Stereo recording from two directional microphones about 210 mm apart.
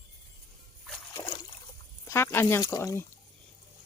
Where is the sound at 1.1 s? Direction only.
20° left (ahead or behind).